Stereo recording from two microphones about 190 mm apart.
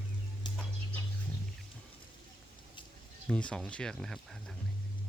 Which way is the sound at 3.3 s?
5° left (ahead or behind).